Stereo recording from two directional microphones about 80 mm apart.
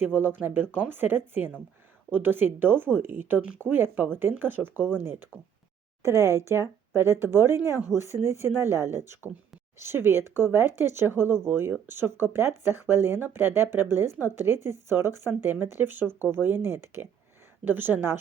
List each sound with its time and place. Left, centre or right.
0.0 s speech: right